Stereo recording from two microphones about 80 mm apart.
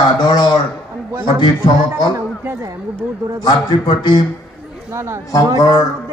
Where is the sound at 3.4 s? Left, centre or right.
Left.